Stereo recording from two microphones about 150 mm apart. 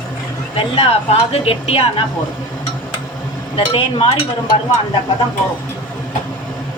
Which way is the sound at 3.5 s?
40° left (ahead or behind).